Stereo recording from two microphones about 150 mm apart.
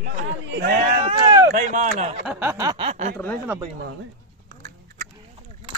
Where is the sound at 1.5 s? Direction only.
50° right (ahead or behind).